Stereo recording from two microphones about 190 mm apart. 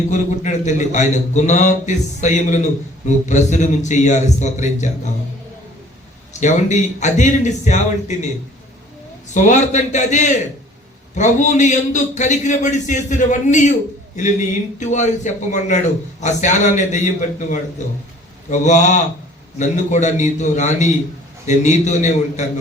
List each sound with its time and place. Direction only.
0.1 s a man's voice: 40° left (ahead or behind)
6.4 s a man's voice: 40° left (ahead or behind)
9.3 s a man's voice: 40° left (ahead or behind)
14.8 s a man's voice: 40° left (ahead or behind)